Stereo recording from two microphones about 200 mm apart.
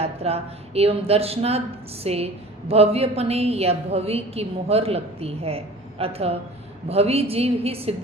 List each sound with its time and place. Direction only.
0.0 s a woman's voice: 30° right (ahead or behind)